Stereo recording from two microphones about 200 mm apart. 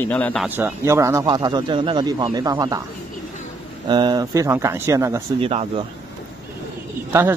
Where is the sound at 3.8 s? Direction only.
20° right (ahead or behind).